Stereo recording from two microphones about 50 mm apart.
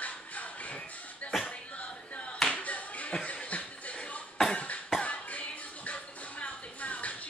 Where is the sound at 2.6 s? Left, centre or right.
Left.